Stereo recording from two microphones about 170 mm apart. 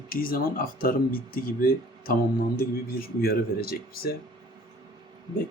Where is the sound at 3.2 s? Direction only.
65° left (ahead or behind).